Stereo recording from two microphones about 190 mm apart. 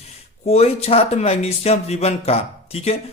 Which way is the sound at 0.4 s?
35° left (ahead or behind).